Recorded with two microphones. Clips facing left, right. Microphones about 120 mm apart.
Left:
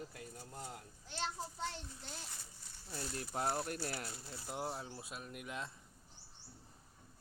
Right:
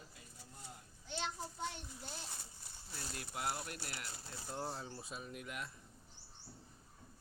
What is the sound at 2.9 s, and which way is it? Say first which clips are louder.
Speech: left 5 dB; 35° left (ahead or behind).